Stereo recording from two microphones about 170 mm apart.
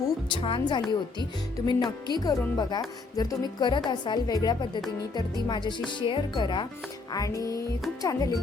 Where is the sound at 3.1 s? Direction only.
25° left (ahead or behind).